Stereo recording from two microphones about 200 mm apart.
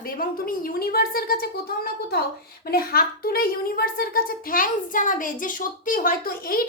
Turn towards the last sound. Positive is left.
turn(degrees=45)  # may be behind; listen again after turning